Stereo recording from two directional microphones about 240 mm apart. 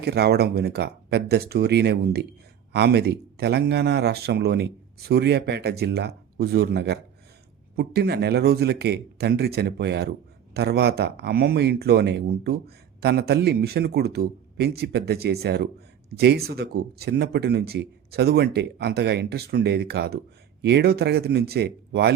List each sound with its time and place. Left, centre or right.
0.0 s a man's voice: right